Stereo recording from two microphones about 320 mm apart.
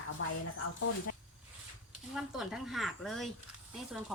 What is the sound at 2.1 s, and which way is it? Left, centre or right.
Speech, centre.